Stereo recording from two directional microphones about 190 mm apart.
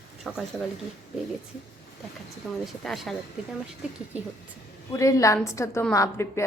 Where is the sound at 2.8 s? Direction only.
Centre (ahead or behind).